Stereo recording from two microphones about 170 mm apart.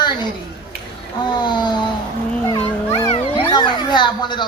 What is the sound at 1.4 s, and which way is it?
Speech, 25° left (ahead or behind).